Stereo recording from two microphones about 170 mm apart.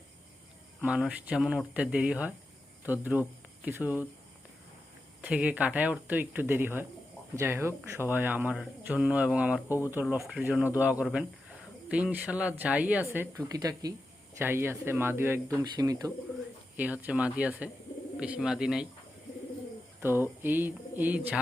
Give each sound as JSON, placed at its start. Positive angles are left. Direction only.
{"t": 0.8, "sound": "speech", "side_deg": -5}
{"t": 5.2, "sound": "speech", "side_deg": -10}
{"t": 13.1, "sound": "speech", "side_deg": -20}
{"t": 16.7, "sound": "speech", "side_deg": -10}
{"t": 20.0, "sound": "speech", "side_deg": -15}